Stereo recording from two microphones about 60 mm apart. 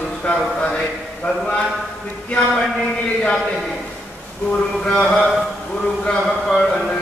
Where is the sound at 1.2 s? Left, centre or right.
Centre.